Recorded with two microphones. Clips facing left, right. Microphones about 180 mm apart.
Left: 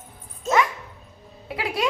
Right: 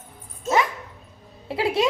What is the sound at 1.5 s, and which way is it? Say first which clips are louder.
Music: right 6 dB; 30° right (ahead or behind).